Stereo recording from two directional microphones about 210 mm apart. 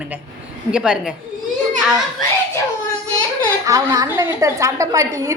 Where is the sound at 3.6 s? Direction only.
15° right (ahead or behind).